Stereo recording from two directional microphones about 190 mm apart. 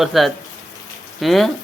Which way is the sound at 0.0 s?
Centre (ahead or behind).